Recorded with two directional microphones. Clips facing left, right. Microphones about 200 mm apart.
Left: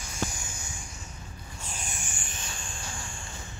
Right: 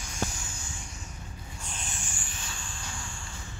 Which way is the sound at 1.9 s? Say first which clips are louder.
Left 1 dB; 15° left (ahead or behind).